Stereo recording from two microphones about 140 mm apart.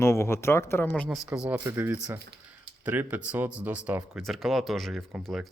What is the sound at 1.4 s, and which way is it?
Speech, 10° right (ahead or behind).